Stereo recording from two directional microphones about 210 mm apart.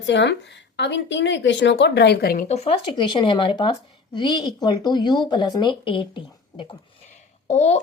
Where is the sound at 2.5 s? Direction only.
30° left (ahead or behind).